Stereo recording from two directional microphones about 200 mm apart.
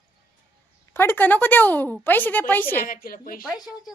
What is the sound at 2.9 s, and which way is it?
Speech, 45° left (ahead or behind).